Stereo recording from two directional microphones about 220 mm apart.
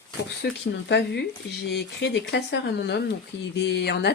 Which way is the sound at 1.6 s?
50° left (ahead or behind).